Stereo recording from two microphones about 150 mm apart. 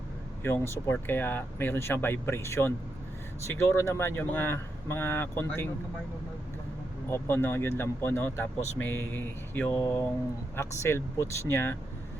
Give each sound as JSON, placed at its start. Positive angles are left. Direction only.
{"t": 0.4, "sound": "speech", "side_deg": 15}
{"t": 7.1, "sound": "speech", "side_deg": 15}